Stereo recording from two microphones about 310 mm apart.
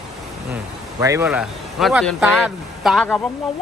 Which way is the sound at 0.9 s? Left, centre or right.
Centre.